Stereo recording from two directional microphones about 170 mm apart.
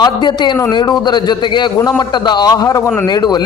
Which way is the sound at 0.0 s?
25° left (ahead or behind).